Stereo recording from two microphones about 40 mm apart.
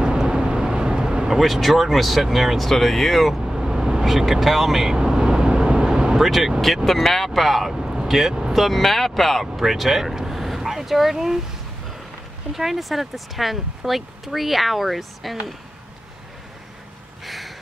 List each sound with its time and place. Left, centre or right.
0.0 s vehicle: right
1.4 s speech: centre
3.5 s speech: centre
4.9 s vehicle: centre
6.1 s speech: centre
6.6 s speech: centre
7.2 s speech: centre
8.5 s speech: centre
12.5 s speech: centre
17.2 s a sound: centre